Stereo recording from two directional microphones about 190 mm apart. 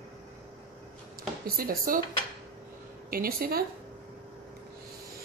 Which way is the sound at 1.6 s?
50° right (ahead or behind).